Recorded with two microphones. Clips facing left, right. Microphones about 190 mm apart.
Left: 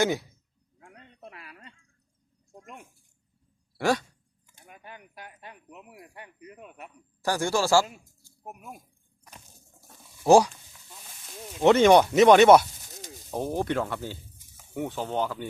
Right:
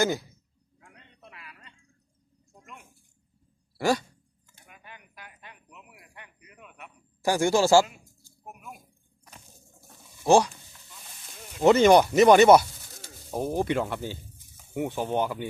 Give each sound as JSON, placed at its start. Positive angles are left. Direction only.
{"t": 0.0, "sound": "speech", "side_deg": 0}
{"t": 0.9, "sound": "a sound", "side_deg": 40}
{"t": 3.8, "sound": "a sound", "side_deg": 0}
{"t": 4.6, "sound": "a sound", "side_deg": 40}
{"t": 7.3, "sound": "speech", "side_deg": -15}
{"t": 10.2, "sound": "speech", "side_deg": 10}
{"t": 11.6, "sound": "speech", "side_deg": -5}
{"t": 12.7, "sound": "snake", "side_deg": 15}
{"t": 13.3, "sound": "speech", "side_deg": -10}